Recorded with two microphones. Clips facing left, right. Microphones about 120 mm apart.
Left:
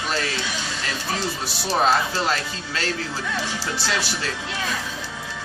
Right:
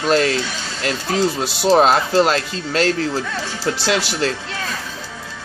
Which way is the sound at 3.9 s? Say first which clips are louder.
Right 8 dB; 80° right.